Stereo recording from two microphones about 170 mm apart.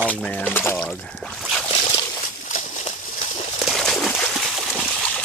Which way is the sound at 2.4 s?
45° left (ahead or behind).